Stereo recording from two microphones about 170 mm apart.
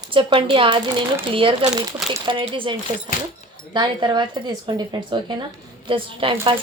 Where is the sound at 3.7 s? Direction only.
25° right (ahead or behind).